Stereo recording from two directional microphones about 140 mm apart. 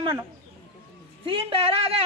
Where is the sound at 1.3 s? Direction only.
40° right (ahead or behind).